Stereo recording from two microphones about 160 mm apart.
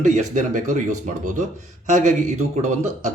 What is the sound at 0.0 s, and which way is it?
Speech, 50° right (ahead or behind).